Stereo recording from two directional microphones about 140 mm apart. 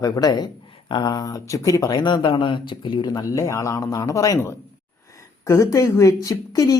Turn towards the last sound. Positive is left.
turn(degrees=25)  # may be behind; listen again after turning